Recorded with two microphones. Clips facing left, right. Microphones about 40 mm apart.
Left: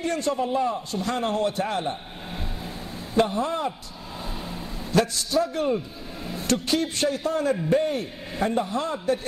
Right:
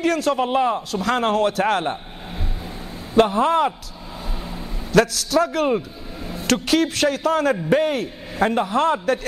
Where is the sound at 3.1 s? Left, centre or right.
Right.